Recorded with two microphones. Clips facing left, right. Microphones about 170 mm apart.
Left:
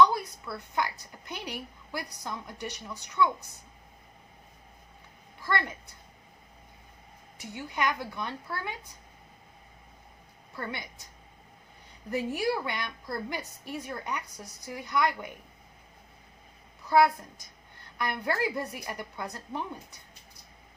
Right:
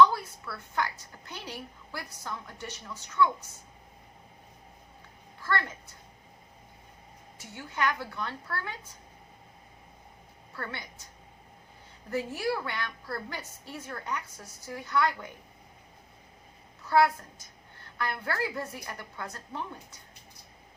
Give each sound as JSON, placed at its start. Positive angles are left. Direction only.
{"t": 0.0, "sound": "a woman's voice", "side_deg": 15}
{"t": 5.4, "sound": "a woman's voice", "side_deg": 15}
{"t": 7.3, "sound": "a woman's voice", "side_deg": 15}
{"t": 10.5, "sound": "a woman's voice", "side_deg": 15}
{"t": 12.1, "sound": "a woman's voice", "side_deg": 15}
{"t": 16.8, "sound": "a woman's voice", "side_deg": 15}